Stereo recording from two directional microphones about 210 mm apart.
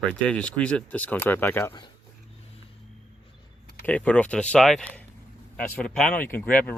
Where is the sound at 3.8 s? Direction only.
5° left (ahead or behind).